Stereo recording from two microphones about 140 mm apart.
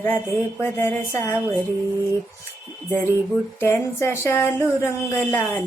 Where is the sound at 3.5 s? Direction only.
15° left (ahead or behind).